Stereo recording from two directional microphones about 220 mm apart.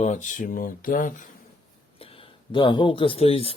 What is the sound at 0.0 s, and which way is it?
Speech, 35° left (ahead or behind).